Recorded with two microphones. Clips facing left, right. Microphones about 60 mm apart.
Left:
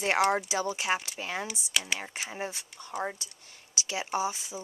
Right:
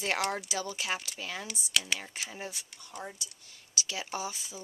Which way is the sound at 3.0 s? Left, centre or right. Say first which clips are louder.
Left 8 dB; left.